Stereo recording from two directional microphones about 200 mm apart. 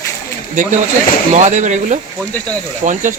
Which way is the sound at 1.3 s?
35° right (ahead or behind).